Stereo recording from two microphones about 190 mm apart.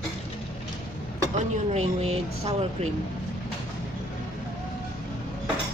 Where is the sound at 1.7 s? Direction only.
35° right (ahead or behind).